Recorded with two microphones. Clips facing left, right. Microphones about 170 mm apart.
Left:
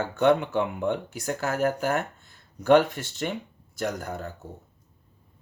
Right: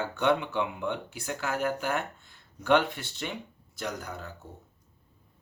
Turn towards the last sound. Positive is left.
turn(degrees=50)  # may be behind; listen again after turning